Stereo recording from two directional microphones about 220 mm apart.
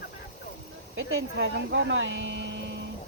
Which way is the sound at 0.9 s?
55° right (ahead or behind).